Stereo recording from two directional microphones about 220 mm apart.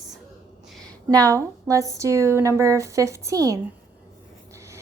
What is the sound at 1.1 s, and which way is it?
Speech, 15° right (ahead or behind).